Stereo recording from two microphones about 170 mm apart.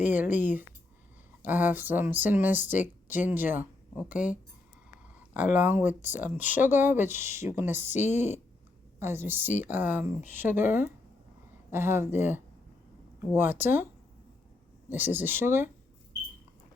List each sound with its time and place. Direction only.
0.0 s speech: 10° right (ahead or behind)
5.3 s speech: 10° right (ahead or behind)
8.0 s speech: 40° left (ahead or behind)
9.0 s speech: 15° right (ahead or behind)
14.8 s speech: 10° right (ahead or behind)